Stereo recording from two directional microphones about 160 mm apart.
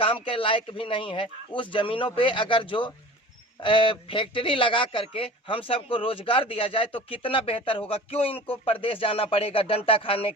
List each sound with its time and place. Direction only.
0.0 s speech: 35° left (ahead or behind)